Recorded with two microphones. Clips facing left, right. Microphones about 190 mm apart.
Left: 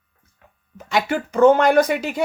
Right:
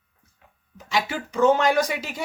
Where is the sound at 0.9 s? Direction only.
55° left (ahead or behind).